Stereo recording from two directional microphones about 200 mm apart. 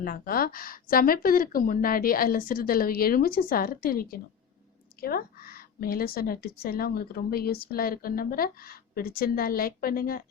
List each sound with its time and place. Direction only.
0.0 s a woman's voice: 45° left (ahead or behind)